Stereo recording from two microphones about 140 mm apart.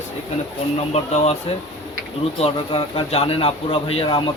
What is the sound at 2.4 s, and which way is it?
Speech, 40° left (ahead or behind).